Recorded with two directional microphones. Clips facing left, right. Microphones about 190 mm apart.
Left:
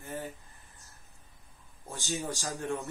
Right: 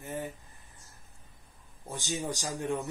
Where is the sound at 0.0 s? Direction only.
20° right (ahead or behind).